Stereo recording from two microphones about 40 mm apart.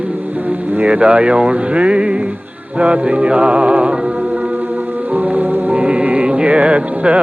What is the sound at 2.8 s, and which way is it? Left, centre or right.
Music, right.